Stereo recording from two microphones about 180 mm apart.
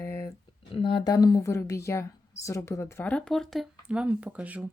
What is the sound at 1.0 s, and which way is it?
A woman's voice, 20° left (ahead or behind).